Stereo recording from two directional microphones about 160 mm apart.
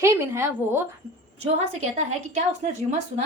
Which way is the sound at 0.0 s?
15° right (ahead or behind).